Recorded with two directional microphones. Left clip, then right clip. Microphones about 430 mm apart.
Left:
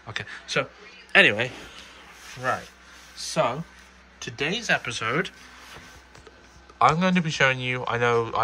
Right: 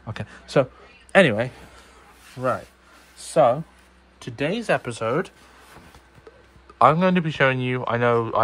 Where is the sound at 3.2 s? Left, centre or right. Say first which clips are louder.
Right 7 dB; centre.